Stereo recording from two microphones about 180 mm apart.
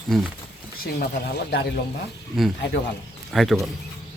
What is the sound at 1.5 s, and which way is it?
Speech, 70° left (ahead or behind).